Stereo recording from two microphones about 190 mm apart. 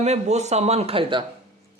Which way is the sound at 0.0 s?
35° right (ahead or behind).